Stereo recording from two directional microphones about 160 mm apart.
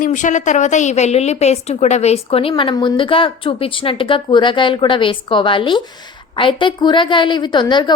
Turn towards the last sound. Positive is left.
turn(degrees=25)  # may be behind; listen again after turning